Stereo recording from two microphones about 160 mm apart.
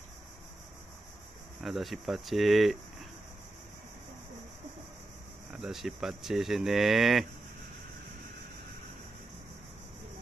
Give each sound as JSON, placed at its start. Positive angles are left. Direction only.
{"t": 1.6, "sound": "speech", "side_deg": 0}
{"t": 5.5, "sound": "speech", "side_deg": 0}